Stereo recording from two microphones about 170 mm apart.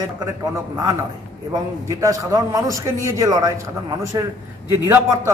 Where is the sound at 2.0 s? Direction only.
20° right (ahead or behind).